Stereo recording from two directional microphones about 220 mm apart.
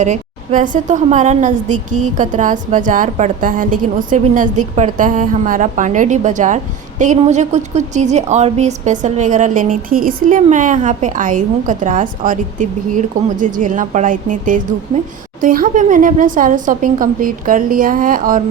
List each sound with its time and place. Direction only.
0.0 s a woman's voice: 35° right (ahead or behind)